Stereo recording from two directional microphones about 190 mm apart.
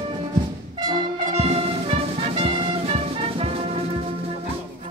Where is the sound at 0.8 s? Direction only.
30° right (ahead or behind).